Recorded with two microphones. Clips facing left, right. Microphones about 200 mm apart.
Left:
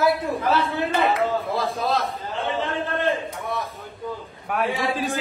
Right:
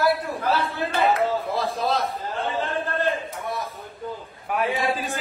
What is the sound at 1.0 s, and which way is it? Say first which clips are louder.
A man's voice: right 2 dB; centre (ahead or behind).